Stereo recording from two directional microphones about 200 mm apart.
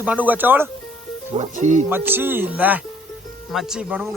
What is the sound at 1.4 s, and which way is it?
Speech, 40° right (ahead or behind).